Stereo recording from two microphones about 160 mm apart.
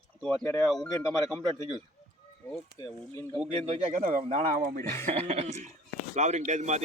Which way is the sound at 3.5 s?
40° right (ahead or behind).